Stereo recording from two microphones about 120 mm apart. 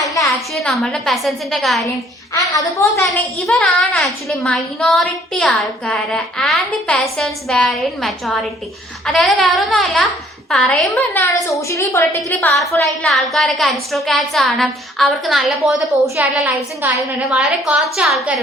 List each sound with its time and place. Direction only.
0.0 s a sound: 30° left (ahead or behind)
0.3 s a woman's voice: centre (ahead or behind)
2.3 s a woman's voice: 25° left (ahead or behind)
3.0 s a woman's voice: centre (ahead or behind)
11.1 s a woman's voice: 25° left (ahead or behind)
12.8 s a woman's voice: centre (ahead or behind)
16.2 s a woman's voice: 10° right (ahead or behind)